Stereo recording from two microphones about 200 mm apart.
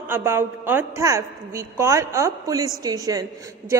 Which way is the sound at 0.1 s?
10° right (ahead or behind).